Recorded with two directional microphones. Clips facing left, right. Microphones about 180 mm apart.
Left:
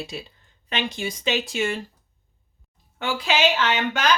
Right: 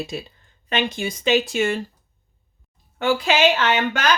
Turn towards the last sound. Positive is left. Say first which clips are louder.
# right 2 dB
turn(degrees=-50)  # may be behind; listen again after turning